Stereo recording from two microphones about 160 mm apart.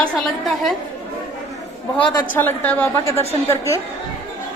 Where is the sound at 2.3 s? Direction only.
10° left (ahead or behind).